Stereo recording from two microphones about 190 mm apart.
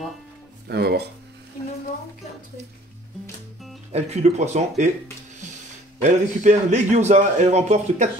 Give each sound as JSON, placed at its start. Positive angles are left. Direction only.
{"t": 0.7, "sound": "speech", "side_deg": -60}
{"t": 3.9, "sound": "a man's voice", "side_deg": -35}
{"t": 6.0, "sound": "a man's voice", "side_deg": -40}